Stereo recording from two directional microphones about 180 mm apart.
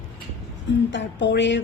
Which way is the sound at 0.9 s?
90° left.